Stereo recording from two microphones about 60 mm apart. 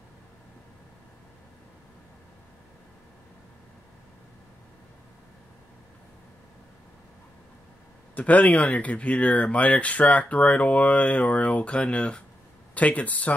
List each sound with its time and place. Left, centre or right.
8.1 s speech: left